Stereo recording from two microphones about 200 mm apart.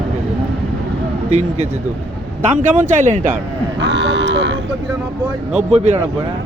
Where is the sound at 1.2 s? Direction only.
35° right (ahead or behind).